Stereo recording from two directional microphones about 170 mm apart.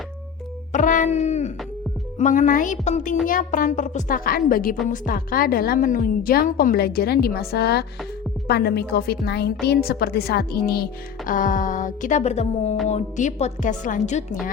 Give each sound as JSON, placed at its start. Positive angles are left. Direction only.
{"t": 0.7, "sound": "a sound", "side_deg": 50}
{"t": 2.1, "sound": "a woman's voice", "side_deg": 45}
{"t": 11.3, "sound": "a woman's voice", "side_deg": 50}